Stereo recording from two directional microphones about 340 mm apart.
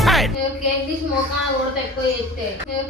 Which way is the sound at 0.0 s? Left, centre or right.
Centre.